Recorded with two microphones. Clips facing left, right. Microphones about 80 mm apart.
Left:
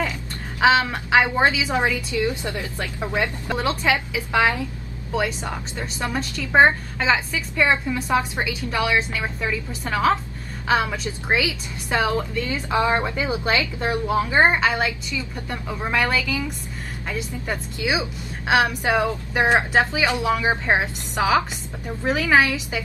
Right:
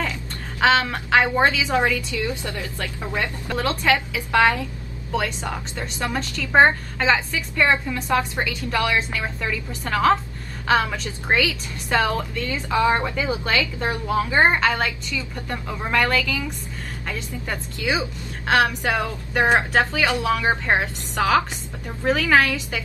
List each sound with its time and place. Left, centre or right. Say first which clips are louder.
0.6 s a woman's voice: left 1 dB; centre
14.5 s a woman's voice: even; centre